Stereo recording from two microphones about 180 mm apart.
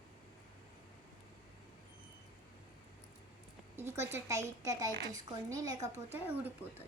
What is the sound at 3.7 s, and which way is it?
A woman's voice, 15° right (ahead or behind).